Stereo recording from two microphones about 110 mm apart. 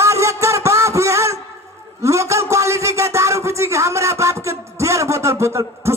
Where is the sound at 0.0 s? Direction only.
25° right (ahead or behind).